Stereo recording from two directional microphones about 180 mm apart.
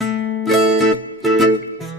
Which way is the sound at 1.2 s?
Centre (ahead or behind).